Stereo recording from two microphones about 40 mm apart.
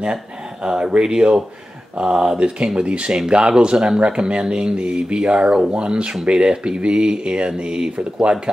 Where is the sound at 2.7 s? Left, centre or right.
Right.